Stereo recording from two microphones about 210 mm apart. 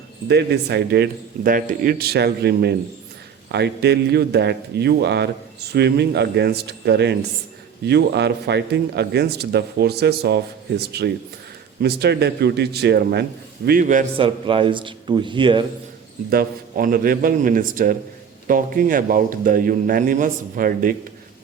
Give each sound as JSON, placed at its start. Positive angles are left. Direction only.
{"t": 0.3, "sound": "a man's voice", "side_deg": -55}
{"t": 1.5, "sound": "a man's voice", "side_deg": -40}
{"t": 13.7, "sound": "a man's voice", "side_deg": -40}
{"t": 16.3, "sound": "a man's voice", "side_deg": -45}